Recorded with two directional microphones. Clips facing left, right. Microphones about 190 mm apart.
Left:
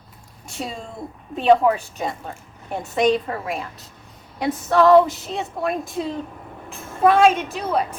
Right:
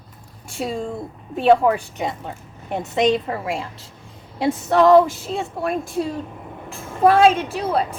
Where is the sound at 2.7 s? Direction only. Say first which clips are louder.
Even; 20° right (ahead or behind).